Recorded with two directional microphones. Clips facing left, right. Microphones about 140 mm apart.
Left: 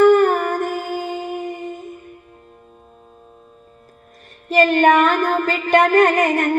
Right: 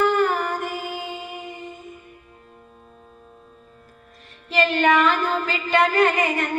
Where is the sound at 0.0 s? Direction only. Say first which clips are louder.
Left 8 dB; 50° left (ahead or behind).